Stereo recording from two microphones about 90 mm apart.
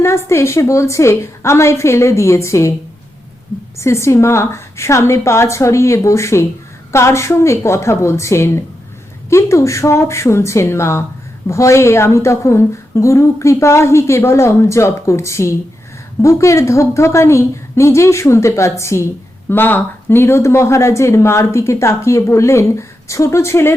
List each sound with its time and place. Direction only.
0.0 s a woman's voice: 30° left (ahead or behind)
3.8 s a woman's voice: 30° left (ahead or behind)